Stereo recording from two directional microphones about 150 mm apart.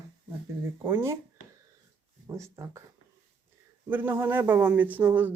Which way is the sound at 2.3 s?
20° right (ahead or behind).